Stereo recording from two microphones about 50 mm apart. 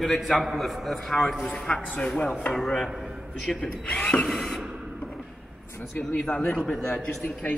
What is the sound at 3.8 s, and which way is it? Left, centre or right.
Speech, left.